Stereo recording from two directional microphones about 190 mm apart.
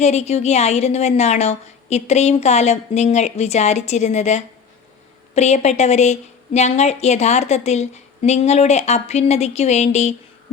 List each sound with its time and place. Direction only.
0.0 s a woman's voice: 35° left (ahead or behind)